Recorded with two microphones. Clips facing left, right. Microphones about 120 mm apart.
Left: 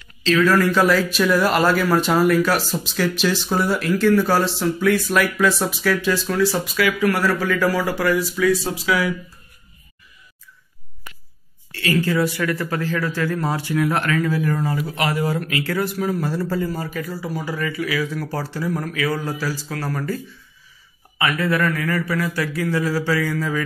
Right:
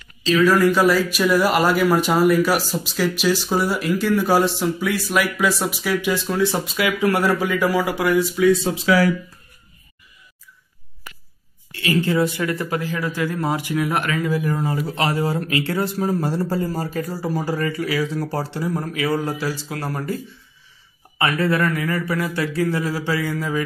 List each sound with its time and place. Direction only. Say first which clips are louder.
0.5 s speech: right 1 dB; 10° right (ahead or behind); by 8.9 s 25° right (ahead or behind)
11.7 s speech: even; 20° right (ahead or behind)
14.8 s speech: right 1 dB; 30° right (ahead or behind)
21.2 s speech: right 1 dB; 35° right (ahead or behind)